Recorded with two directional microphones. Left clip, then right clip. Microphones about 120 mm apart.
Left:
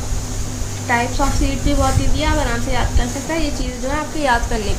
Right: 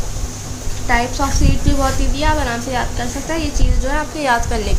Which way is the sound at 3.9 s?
40° right (ahead or behind).